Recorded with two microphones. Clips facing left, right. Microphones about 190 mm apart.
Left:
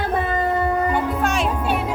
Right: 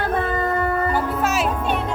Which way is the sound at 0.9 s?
5° right (ahead or behind).